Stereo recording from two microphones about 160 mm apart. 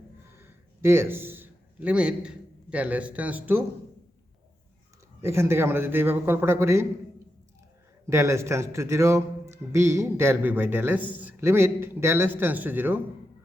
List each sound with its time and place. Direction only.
0.3 s a man's voice: 15° right (ahead or behind)
5.2 s speech: 15° right (ahead or behind)
8.0 s speech: 20° right (ahead or behind)